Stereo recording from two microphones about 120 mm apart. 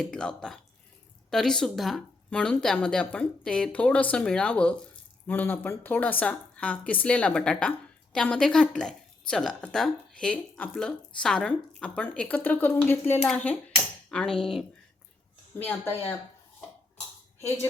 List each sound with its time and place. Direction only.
0.0 s a woman's voice: 5° left (ahead or behind)
14.1 s cutlery: 5° left (ahead or behind)
15.5 s a woman's voice: 15° left (ahead or behind)